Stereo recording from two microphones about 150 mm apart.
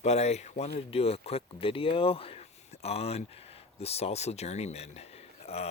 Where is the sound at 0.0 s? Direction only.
45° left (ahead or behind).